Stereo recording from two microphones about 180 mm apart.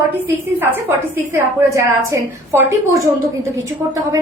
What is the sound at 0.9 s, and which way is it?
A woman's voice, 15° right (ahead or behind).